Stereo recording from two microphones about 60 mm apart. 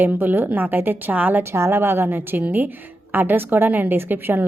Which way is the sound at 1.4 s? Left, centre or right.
Right.